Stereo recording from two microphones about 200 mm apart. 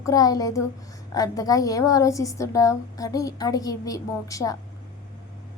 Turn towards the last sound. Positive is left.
turn(degrees=15)  # may be behind; listen again after turning